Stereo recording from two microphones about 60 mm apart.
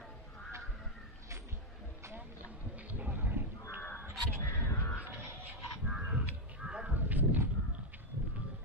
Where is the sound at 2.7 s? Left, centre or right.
Right.